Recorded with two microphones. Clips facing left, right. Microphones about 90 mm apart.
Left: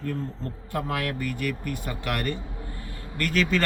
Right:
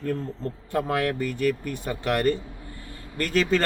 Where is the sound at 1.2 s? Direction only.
30° right (ahead or behind).